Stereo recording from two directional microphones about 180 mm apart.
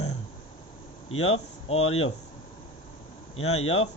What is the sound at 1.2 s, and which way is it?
Speech, 35° left (ahead or behind).